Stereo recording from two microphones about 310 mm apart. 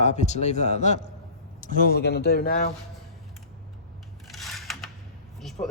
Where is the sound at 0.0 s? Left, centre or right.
Left.